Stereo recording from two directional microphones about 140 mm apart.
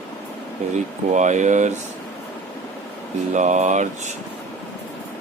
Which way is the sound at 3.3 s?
60° right (ahead or behind).